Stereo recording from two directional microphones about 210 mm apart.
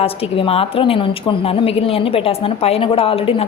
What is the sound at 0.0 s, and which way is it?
A woman's voice, 25° left (ahead or behind).